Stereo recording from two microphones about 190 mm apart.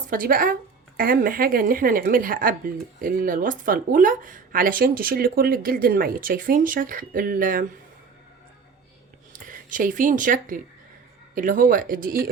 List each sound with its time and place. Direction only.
0.1 s speech: 45° right (ahead or behind)
9.3 s speech: 45° right (ahead or behind)